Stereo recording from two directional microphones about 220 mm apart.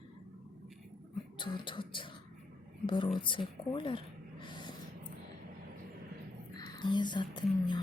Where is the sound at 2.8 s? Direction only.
20° left (ahead or behind).